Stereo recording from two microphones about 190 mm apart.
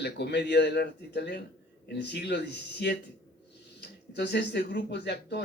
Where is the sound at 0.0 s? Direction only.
60° left (ahead or behind).